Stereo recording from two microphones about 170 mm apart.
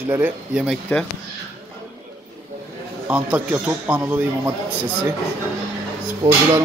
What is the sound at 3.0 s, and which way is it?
Speech, 10° right (ahead or behind).